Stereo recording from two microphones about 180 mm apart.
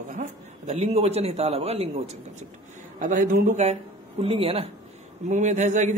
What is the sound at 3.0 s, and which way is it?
Speech, 45° right (ahead or behind).